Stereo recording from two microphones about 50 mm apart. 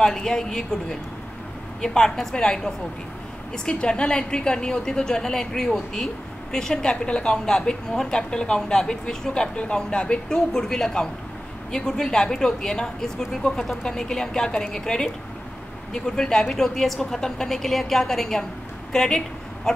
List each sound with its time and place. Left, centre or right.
0.0 s a woman's voice: centre
13.8 s a woman's voice: centre
18.9 s a sound: centre